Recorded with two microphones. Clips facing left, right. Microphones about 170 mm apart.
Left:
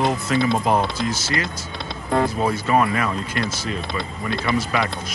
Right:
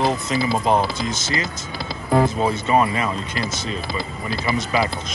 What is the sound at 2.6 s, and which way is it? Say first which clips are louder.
Speech: right 1 dB; 25° right (ahead or behind).